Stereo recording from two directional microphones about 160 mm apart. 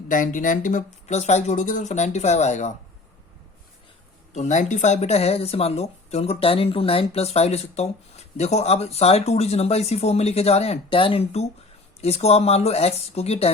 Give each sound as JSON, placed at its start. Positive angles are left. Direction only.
{"t": 0.1, "sound": "speech", "side_deg": 55}
{"t": 4.4, "sound": "speech", "side_deg": 50}